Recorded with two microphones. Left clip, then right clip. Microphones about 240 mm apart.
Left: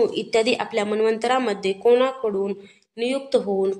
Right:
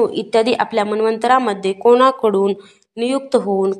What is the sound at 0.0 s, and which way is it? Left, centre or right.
Speech, centre.